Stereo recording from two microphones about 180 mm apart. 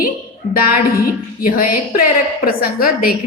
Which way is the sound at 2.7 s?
55° left (ahead or behind).